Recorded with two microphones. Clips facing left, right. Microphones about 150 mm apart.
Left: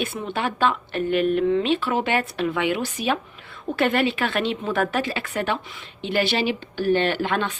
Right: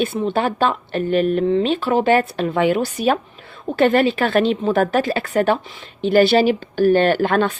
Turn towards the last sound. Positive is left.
turn(degrees=-45)  # may be behind; listen again after turning